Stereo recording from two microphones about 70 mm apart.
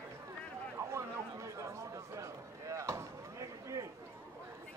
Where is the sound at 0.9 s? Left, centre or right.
Right.